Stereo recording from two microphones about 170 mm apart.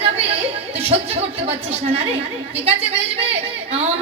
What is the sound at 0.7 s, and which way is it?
Speech, 35° right (ahead or behind).